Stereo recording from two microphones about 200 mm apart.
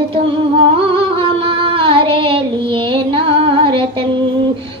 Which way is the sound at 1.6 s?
25° right (ahead or behind).